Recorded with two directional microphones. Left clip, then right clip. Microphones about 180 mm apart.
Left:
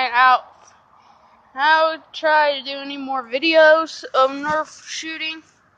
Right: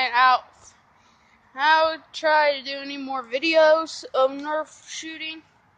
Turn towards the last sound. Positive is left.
turn(degrees=-5)  # may be behind; listen again after turning